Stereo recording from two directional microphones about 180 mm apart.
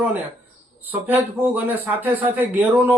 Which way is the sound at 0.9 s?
10° right (ahead or behind).